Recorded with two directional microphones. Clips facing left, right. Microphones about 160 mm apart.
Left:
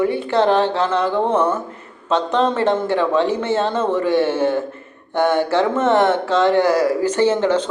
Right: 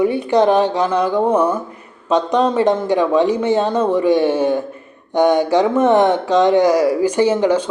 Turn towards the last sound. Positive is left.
turn(degrees=-10)  # may be behind; listen again after turning